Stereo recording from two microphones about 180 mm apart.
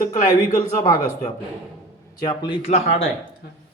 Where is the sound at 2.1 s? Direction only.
25° left (ahead or behind).